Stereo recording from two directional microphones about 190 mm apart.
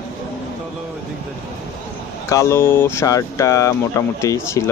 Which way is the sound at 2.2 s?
15° left (ahead or behind).